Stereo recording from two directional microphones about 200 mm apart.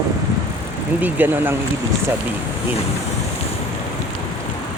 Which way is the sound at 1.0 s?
10° right (ahead or behind).